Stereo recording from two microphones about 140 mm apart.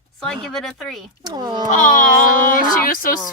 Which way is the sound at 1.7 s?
70° left (ahead or behind).